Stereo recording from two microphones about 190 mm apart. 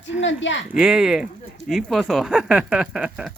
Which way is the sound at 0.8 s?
Centre (ahead or behind).